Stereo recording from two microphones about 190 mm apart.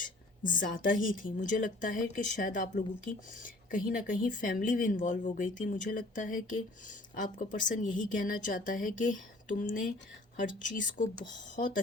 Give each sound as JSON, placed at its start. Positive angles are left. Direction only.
{"t": 0.0, "sound": "a sound", "side_deg": 45}
{"t": 1.1, "sound": "speech", "side_deg": 45}
{"t": 10.8, "sound": "speech", "side_deg": 45}